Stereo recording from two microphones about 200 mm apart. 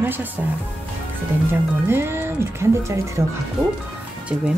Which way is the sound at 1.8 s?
10° right (ahead or behind).